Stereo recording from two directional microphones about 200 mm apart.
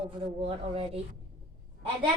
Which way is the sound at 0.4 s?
30° right (ahead or behind).